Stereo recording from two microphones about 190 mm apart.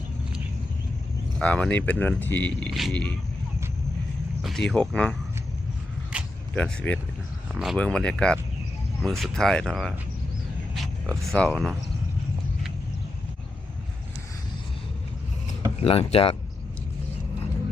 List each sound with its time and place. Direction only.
1.4 s speech: 5° left (ahead or behind)
4.4 s speech: centre (ahead or behind)
6.1 s a sound: 5° right (ahead or behind)
6.5 s speech: 5° left (ahead or behind)
15.8 s speech: 30° left (ahead or behind)